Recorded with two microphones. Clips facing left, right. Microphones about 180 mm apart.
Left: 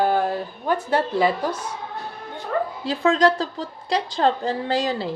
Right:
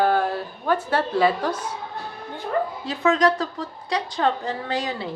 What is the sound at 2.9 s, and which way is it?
A woman's voice, 30° left (ahead or behind).